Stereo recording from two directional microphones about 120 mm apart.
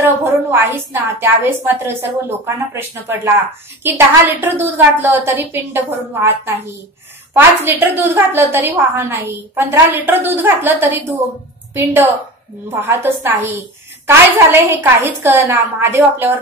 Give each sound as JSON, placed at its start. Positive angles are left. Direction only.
{"t": 0.2, "sound": "a woman's voice", "side_deg": -20}
{"t": 4.4, "sound": "a woman's voice", "side_deg": -15}